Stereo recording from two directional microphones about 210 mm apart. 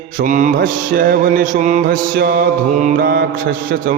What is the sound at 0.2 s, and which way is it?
Mantra, 40° right (ahead or behind).